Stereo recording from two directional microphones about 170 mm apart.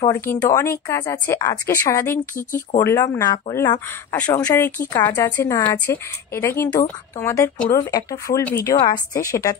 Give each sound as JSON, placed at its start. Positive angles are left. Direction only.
{"t": 0.0, "sound": "speech", "side_deg": 15}